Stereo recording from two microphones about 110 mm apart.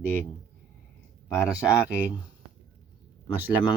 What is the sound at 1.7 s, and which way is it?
Speech, 25° left (ahead or behind).